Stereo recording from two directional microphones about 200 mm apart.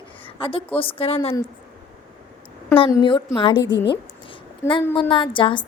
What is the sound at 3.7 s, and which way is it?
Speech, 60° left (ahead or behind).